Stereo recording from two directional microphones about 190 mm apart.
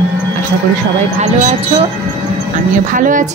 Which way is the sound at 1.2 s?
35° right (ahead or behind).